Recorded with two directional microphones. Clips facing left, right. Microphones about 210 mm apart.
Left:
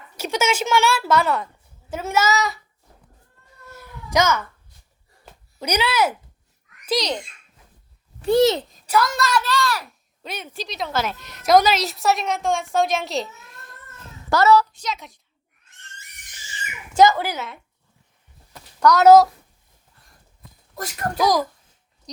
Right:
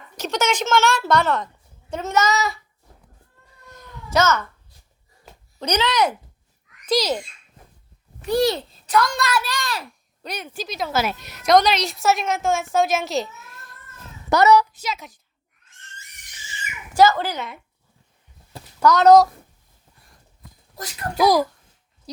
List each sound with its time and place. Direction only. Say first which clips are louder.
0.2 s a woman's voice: even; 10° left (ahead or behind)
3.7 s cat: even; 10° left (ahead or behind)
5.5 s a woman's voice: right 1 dB; 10° left (ahead or behind)
8.2 s a child's voice: left 3 dB; 25° left (ahead or behind)
8.9 s a woman's voice: even; 5° left (ahead or behind)
9.4 s a child's voice: left 5 dB; 15° right (ahead or behind)
10.2 s a woman's voice: right 1 dB; centre (ahead or behind)
11.4 s a woman's voice: even; 5° left (ahead or behind)
14.3 s a child's voice: right 1 dB; 20° right (ahead or behind)
14.7 s a woman's voice: even; 5° right (ahead or behind)
16.9 s speech: left 1 dB; 15° left (ahead or behind)
18.8 s a woman's voice: left 1 dB; centre (ahead or behind)
21.2 s a child's voice: right 3 dB; 10° right (ahead or behind)